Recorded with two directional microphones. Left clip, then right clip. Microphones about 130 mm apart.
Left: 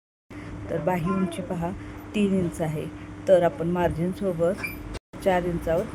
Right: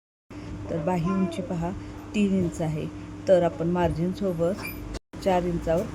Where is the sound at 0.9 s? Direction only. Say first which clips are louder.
Left 1 dB; 15° left (ahead or behind).